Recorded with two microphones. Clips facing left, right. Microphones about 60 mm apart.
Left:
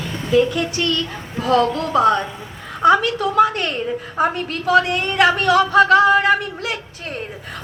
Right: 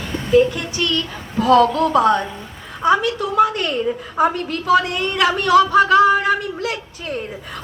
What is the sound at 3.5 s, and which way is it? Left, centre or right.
A woman's voice, left.